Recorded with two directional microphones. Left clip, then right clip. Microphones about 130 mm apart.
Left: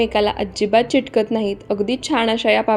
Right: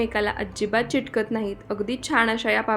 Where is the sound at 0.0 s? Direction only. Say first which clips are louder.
Left 7 dB; 15° left (ahead or behind).